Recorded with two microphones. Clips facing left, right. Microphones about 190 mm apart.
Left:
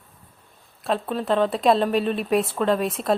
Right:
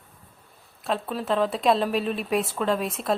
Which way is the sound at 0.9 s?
Centre (ahead or behind).